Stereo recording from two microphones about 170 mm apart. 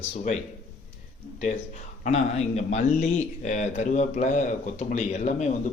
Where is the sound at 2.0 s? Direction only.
40° left (ahead or behind).